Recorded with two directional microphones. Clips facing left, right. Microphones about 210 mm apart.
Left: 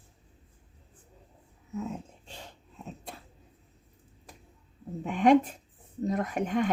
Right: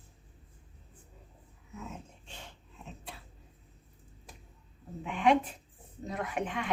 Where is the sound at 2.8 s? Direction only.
40° left (ahead or behind).